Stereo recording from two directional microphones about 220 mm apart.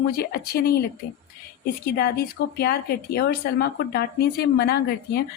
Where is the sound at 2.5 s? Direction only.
45° left (ahead or behind).